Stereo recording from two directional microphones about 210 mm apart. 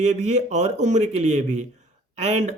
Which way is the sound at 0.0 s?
35° right (ahead or behind).